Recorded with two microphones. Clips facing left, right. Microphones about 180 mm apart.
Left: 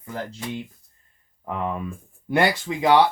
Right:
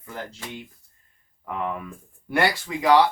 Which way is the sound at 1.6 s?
25° left (ahead or behind).